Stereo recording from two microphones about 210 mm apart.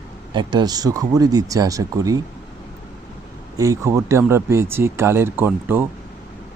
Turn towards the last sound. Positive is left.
turn(degrees=-10)  # may be behind; listen again after turning